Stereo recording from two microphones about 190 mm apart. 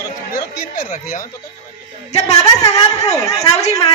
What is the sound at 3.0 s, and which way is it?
Speech, 20° left (ahead or behind).